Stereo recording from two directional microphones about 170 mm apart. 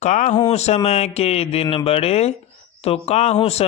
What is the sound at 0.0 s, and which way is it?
A man's voice, 45° left (ahead or behind).